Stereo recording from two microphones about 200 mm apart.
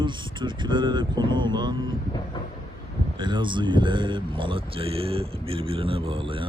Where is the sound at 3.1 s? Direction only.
25° right (ahead or behind).